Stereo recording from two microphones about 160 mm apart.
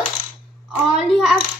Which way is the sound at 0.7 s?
Centre (ahead or behind).